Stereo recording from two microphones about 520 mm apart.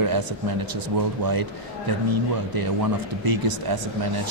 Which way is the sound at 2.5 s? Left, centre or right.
Right.